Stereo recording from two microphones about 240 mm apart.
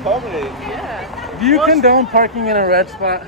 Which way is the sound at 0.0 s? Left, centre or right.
Centre.